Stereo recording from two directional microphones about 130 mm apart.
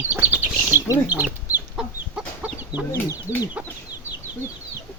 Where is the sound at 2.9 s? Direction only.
15° left (ahead or behind).